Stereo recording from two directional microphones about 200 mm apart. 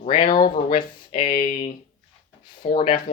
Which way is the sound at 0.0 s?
30° left (ahead or behind).